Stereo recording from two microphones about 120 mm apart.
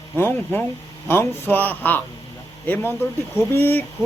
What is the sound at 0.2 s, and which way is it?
Speech, 15° left (ahead or behind).